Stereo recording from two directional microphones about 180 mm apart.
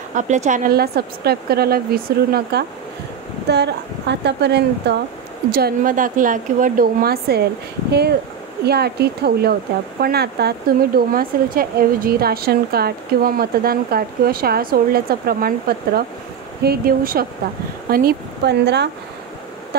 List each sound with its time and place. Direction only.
0.1 s a woman's voice: 40° right (ahead or behind); by 2.6 s 60° right (ahead or behind)
3.4 s speech: 70° right (ahead or behind)
5.5 s a woman's voice: 60° right (ahead or behind)
8.6 s a woman's voice: 65° right (ahead or behind)